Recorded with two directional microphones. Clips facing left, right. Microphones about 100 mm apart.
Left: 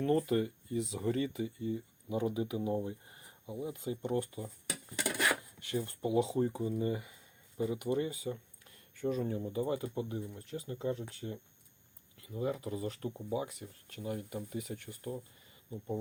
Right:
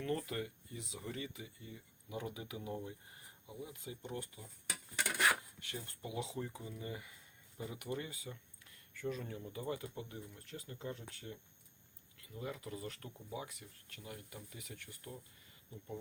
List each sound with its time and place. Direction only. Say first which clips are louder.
0.0 s speech: left 9 dB; 35° left (ahead or behind)
4.0 s speech: left 11 dB; 60° left (ahead or behind)
5.6 s speech: left 13 dB; 35° left (ahead or behind)